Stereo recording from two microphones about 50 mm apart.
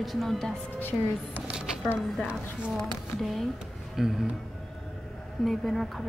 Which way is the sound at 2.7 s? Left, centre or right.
Centre.